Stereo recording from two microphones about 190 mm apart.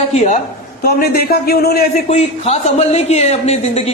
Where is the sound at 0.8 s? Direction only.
55° left (ahead or behind).